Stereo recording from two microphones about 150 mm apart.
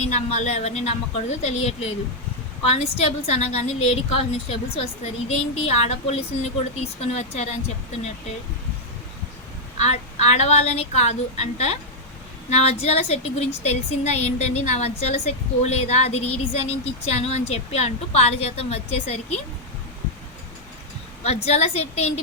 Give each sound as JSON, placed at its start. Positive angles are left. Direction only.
{"t": 0.0, "sound": "a woman's voice", "side_deg": 50}
{"t": 9.7, "sound": "a woman's voice", "side_deg": 45}
{"t": 21.4, "sound": "a woman's voice", "side_deg": 45}